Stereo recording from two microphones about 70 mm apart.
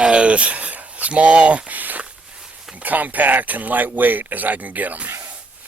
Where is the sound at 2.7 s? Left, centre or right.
Right.